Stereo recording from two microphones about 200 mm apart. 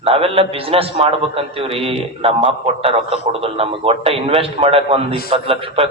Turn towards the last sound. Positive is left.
turn(degrees=-30)  # may be behind; listen again after turning